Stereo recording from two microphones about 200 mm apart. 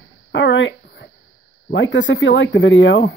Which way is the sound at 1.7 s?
65° left (ahead or behind).